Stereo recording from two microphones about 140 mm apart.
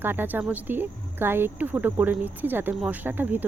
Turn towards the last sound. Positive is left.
turn(degrees=-15)  # may be behind; listen again after turning